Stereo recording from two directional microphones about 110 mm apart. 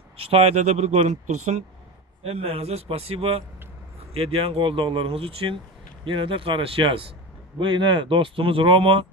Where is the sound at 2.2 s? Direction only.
65° right (ahead or behind).